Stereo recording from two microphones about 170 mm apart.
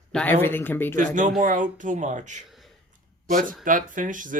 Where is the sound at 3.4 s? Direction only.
50° right (ahead or behind).